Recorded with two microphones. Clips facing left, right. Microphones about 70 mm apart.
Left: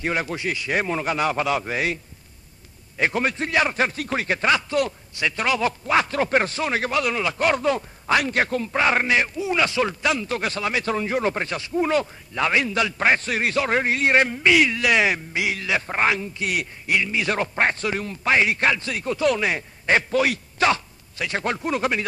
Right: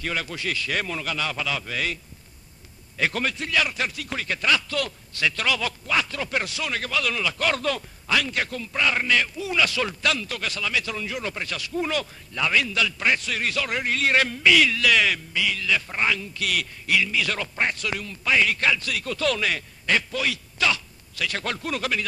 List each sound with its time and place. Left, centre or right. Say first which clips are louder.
0.0 s speech: left 4 dB; left
0.8 s speech: left 6 dB; left
3.0 s speech: left 3 dB; left
3.3 s speech: left 4 dB; left
8.2 s speech: left 5 dB; left
15.1 s speech: left 2 dB; left
19.9 s a man's voice: left 5 dB; left